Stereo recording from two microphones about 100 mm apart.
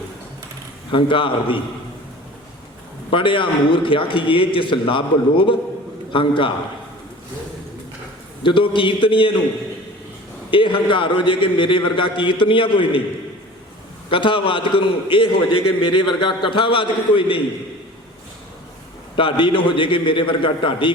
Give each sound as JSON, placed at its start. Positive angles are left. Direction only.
{"t": 0.9, "sound": "a man's voice", "side_deg": 60}
{"t": 3.1, "sound": "a man's voice", "side_deg": 60}
{"t": 8.4, "sound": "a man's voice", "side_deg": 55}
{"t": 10.5, "sound": "a man's voice", "side_deg": 60}
{"t": 14.1, "sound": "a man's voice", "side_deg": 60}
{"t": 19.1, "sound": "a man's voice", "side_deg": 60}